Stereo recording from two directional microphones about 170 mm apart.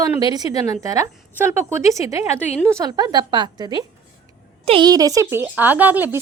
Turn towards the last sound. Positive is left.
turn(degrees=-10)  # may be behind; listen again after turning